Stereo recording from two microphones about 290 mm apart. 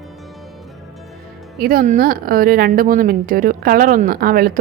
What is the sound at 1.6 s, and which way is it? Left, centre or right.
Speech, right.